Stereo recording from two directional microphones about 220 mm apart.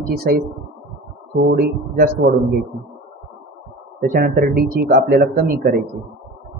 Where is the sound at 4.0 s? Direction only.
40° right (ahead or behind).